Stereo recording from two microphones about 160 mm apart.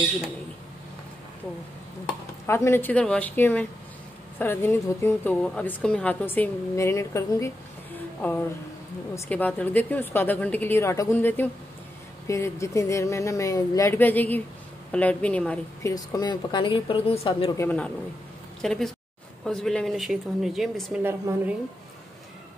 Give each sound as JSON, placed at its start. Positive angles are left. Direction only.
{"t": 2.4, "sound": "a woman's voice", "side_deg": 15}
{"t": 15.8, "sound": "speech", "side_deg": 20}
{"t": 17.6, "sound": "a woman's voice", "side_deg": 10}
{"t": 21.0, "sound": "a woman's voice", "side_deg": -15}